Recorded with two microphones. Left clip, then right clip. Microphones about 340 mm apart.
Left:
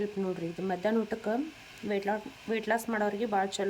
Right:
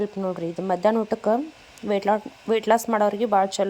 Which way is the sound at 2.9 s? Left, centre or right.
Right.